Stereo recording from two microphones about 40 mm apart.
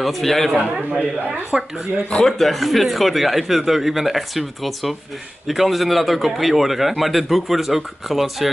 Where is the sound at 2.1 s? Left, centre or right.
Centre.